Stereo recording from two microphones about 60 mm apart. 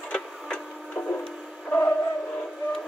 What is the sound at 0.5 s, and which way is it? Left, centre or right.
Tick-tock, left.